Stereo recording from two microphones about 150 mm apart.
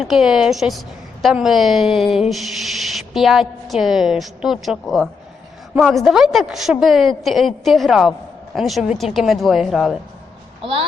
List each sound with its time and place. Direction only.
0.0 s a woman's voice: centre (ahead or behind)
10.6 s a child's voice: 40° right (ahead or behind)